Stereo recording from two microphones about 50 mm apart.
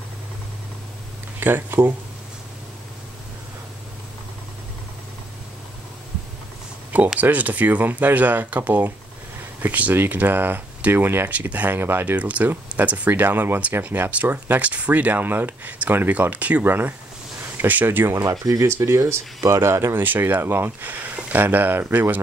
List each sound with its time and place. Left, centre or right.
1.4 s speech: right
7.2 s speech: right
11.2 s speech: right
11.8 s speech: right
12.2 s speech: right
14.1 s speech: right
16.6 s speech: right
18.1 s speech: right
20.0 s speech: right
20.8 s speech: right